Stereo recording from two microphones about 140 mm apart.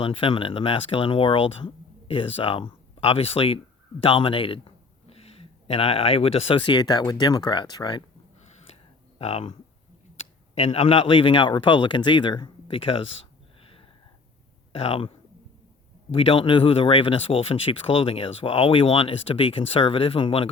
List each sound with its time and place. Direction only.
0.0 s a man's voice: 40° left (ahead or behind)
9.1 s speech: 45° left (ahead or behind)
14.7 s speech: 40° left (ahead or behind)
16.1 s speech: 40° left (ahead or behind)